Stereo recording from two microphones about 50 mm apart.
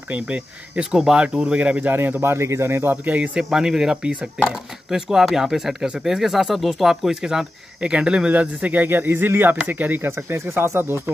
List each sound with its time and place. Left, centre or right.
0.1 s speech: right
2.0 s speech: right
3.4 s speech: centre
8.3 s a man's voice: right